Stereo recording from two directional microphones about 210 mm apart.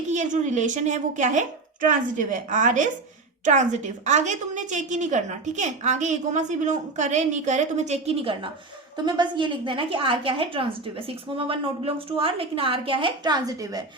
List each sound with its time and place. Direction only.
0.1 s a woman's voice: 35° right (ahead or behind); by 13.8 s 15° right (ahead or behind)